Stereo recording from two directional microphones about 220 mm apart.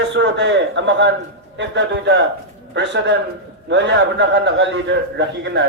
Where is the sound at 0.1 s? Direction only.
55° right (ahead or behind).